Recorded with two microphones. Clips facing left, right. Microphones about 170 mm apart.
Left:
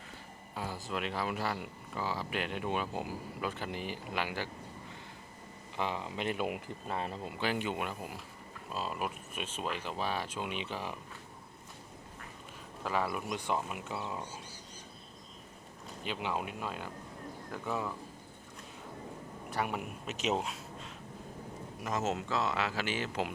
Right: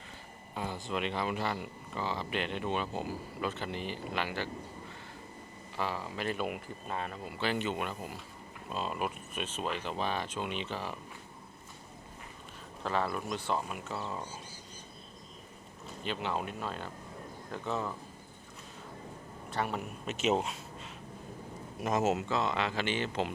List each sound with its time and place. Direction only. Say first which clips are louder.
0.5 s speech: right 2 dB; 5° left (ahead or behind)
5.7 s speech: even; 20° left (ahead or behind)
7.3 s speech: right 2 dB; 10° left (ahead or behind)
12.8 s speech: right 1 dB; 10° left (ahead or behind)
16.0 s speech: right 1 dB; 10° left (ahead or behind)
19.5 s speech: right 1 dB; 10° left (ahead or behind)
20.1 s speech: right 3 dB; centre (ahead or behind)
21.8 s a man's voice: right 5 dB; 20° right (ahead or behind)
22.0 s speech: even; 5° right (ahead or behind)